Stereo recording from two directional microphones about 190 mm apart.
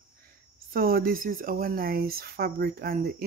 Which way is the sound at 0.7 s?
50° right (ahead or behind).